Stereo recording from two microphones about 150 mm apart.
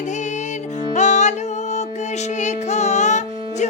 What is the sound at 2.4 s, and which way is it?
Music, 50° left (ahead or behind).